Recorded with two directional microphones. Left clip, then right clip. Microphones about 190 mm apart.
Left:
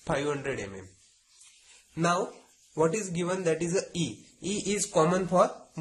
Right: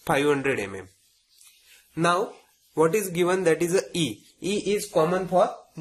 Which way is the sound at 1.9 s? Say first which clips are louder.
Right 5 dB; 5° right (ahead or behind).